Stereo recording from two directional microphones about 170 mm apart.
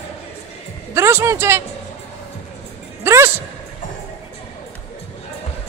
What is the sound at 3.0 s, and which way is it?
Speech, 15° right (ahead or behind).